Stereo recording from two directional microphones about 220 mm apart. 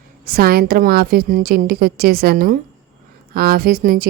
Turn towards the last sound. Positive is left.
turn(degrees=-40)  # may be behind; listen again after turning